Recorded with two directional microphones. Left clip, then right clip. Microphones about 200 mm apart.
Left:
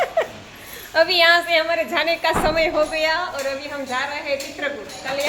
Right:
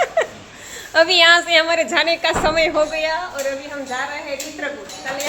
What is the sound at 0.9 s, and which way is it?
A woman's voice, 20° right (ahead or behind).